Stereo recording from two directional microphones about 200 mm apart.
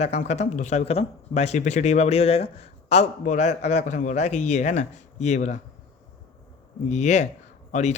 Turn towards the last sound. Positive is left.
turn(degrees=35)  # may be behind; listen again after turning